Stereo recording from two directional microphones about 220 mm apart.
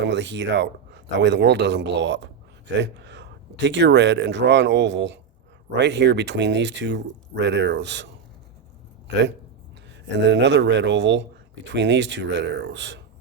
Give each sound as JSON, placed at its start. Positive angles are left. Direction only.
{"t": 0.0, "sound": "speech", "side_deg": -55}
{"t": 9.1, "sound": "speech", "side_deg": -55}
{"t": 10.2, "sound": "speech", "side_deg": -55}